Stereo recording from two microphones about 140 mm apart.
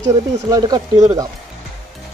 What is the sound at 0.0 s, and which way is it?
Speech, 25° right (ahead or behind).